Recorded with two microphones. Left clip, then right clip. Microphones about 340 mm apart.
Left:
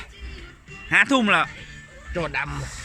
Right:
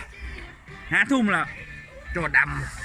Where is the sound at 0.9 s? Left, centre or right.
Centre.